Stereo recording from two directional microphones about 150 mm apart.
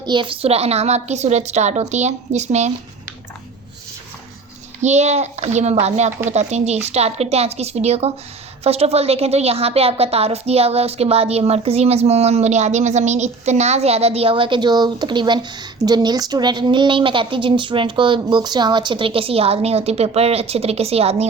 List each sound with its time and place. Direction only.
0.0 s a woman's voice: 30° right (ahead or behind); by 2.7 s 50° right (ahead or behind)
4.8 s a woman's voice: 50° right (ahead or behind)
6.1 s speech: 10° right (ahead or behind)
6.5 s a woman's voice: 45° right (ahead or behind)